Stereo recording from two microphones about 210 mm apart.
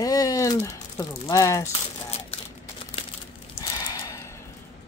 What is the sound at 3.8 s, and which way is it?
Gasp, 15° left (ahead or behind).